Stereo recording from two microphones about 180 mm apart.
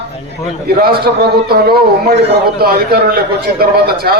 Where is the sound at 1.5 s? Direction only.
65° right (ahead or behind).